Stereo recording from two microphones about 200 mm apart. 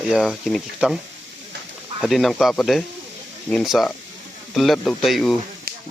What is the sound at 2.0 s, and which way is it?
Speech, centre (ahead or behind).